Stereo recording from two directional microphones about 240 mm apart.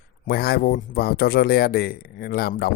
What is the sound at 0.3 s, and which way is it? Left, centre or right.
Speech, left.